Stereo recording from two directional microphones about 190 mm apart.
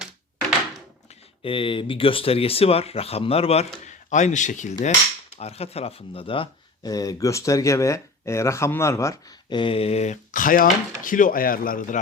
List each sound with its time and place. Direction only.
1.4 s speech: 30° left (ahead or behind); by 11.9 s 45° left (ahead or behind)